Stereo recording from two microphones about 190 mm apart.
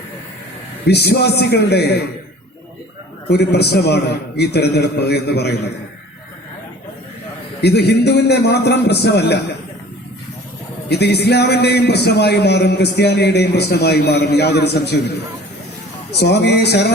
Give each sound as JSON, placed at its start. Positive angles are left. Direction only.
{"t": 0.9, "sound": "a man's voice", "side_deg": 60}
{"t": 3.2, "sound": "a man's voice", "side_deg": 60}
{"t": 7.6, "sound": "a man's voice", "side_deg": 60}
{"t": 10.8, "sound": "a man's voice", "side_deg": 60}
{"t": 16.1, "sound": "a man's voice", "side_deg": 60}